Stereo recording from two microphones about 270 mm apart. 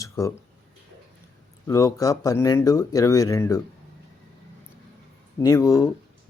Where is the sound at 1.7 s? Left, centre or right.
Centre.